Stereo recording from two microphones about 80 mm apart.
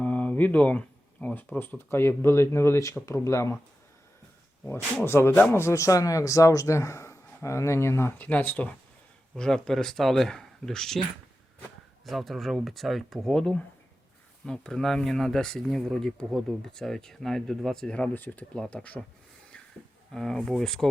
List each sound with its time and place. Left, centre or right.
0.0 s a sound: centre
1.9 s speech: left
5.0 s speech: left
8.3 s speech: left
9.3 s speech: centre
12.0 s speech: centre
18.1 s speech: left
20.1 s speech: centre